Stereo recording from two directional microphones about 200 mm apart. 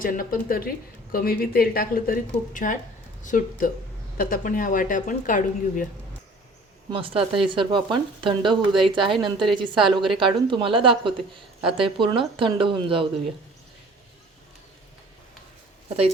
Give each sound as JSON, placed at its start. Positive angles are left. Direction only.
{"t": 0.0, "sound": "speech", "side_deg": 45}
{"t": 6.9, "sound": "speech", "side_deg": -25}